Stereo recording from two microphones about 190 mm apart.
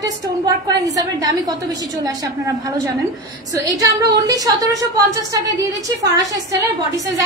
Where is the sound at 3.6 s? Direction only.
20° right (ahead or behind).